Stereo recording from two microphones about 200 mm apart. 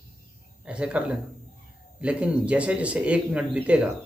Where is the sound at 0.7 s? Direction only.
5° right (ahead or behind).